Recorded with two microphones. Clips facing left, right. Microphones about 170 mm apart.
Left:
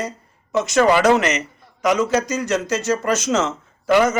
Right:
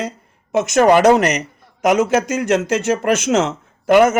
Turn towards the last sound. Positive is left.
turn(degrees=-55)  # may be behind; listen again after turning